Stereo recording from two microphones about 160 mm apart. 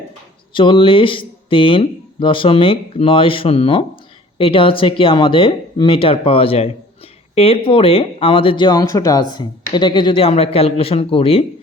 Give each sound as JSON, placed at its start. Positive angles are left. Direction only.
{"t": 0.5, "sound": "speech", "side_deg": 30}